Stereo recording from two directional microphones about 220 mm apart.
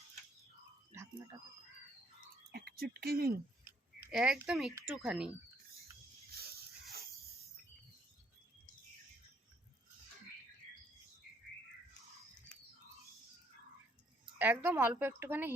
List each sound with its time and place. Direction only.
2.5 s speech: 45° right (ahead or behind)
4.0 s speech: 5° right (ahead or behind)
6.3 s a sound: 45° right (ahead or behind)
14.3 s a woman's voice: 10° right (ahead or behind)